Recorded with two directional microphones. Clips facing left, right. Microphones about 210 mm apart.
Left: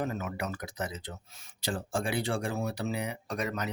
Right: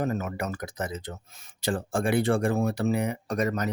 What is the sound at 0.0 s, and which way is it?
Speech, 45° right (ahead or behind).